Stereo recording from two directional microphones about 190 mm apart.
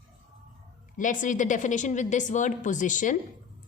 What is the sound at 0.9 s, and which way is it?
A woman's voice, 45° left (ahead or behind).